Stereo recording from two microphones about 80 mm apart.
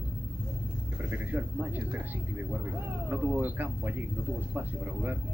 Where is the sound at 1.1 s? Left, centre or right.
Right.